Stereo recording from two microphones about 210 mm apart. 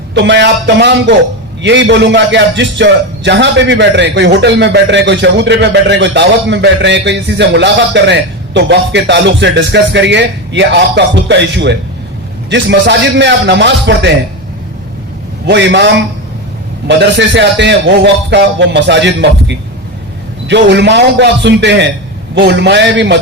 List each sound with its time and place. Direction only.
0.1 s a man's voice: 55° right (ahead or behind)
15.4 s a man's voice: 55° right (ahead or behind)